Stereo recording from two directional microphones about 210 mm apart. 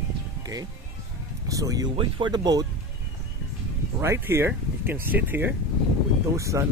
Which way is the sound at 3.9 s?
10° right (ahead or behind).